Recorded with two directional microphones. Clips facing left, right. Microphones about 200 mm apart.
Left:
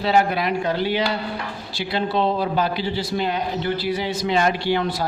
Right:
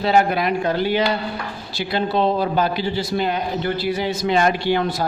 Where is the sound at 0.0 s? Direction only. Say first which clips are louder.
Right 2 dB; 50° right (ahead or behind).